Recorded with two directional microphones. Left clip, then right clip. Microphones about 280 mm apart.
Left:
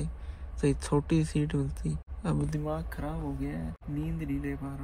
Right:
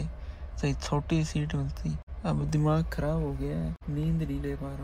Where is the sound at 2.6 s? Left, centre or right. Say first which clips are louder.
Right 10 dB; right.